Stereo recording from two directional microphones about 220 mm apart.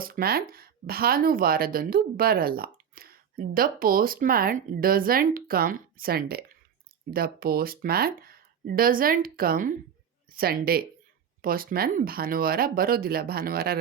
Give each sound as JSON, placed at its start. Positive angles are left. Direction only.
{"t": 0.0, "sound": "speech", "side_deg": -40}